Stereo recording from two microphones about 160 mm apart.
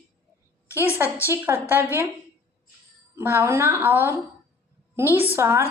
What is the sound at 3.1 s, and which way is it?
A woman's voice, 15° right (ahead or behind).